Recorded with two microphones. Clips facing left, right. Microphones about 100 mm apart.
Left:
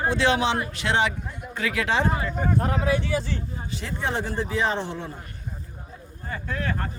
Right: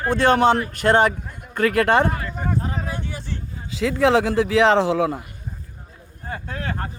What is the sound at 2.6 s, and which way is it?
Vehicle, 75° left (ahead or behind).